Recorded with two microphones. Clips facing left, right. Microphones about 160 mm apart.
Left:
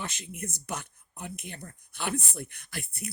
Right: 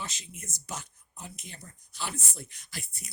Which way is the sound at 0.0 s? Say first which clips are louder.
Left 5 dB; 55° left (ahead or behind).